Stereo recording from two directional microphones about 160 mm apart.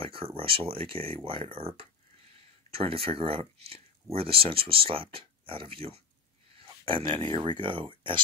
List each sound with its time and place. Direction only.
0.0 s speech: 35° right (ahead or behind)